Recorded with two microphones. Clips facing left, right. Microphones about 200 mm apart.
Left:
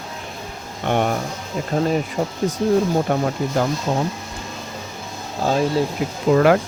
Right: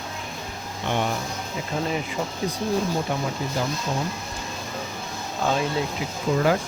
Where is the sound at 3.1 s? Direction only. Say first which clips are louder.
Left 6 dB; 55° left (ahead or behind).